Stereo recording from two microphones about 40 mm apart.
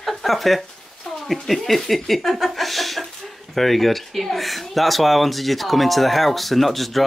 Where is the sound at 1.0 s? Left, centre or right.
Centre.